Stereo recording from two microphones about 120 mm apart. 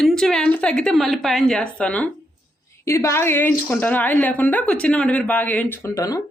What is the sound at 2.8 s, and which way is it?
A woman's voice, 25° left (ahead or behind).